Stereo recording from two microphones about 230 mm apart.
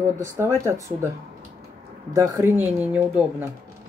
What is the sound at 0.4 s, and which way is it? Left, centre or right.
Speech, centre.